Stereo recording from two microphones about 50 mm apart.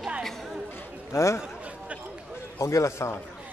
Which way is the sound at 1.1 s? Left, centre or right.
Left.